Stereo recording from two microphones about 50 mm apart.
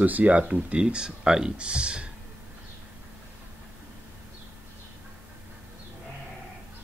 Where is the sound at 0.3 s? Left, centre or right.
Right.